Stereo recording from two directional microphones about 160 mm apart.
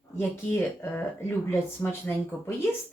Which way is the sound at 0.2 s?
15° left (ahead or behind).